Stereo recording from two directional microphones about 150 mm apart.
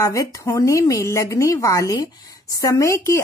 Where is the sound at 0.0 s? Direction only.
25° left (ahead or behind).